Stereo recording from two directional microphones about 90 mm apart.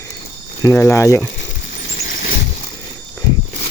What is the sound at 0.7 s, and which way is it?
Speech, 25° left (ahead or behind).